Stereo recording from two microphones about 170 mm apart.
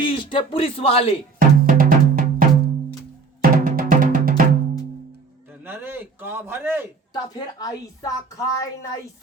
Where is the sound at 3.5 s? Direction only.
55° right (ahead or behind).